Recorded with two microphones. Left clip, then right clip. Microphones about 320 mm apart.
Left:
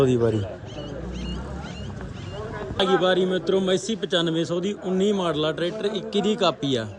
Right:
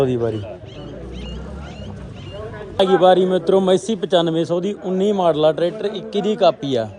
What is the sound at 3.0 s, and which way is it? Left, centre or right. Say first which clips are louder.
A man's voice: right 8 dB; centre.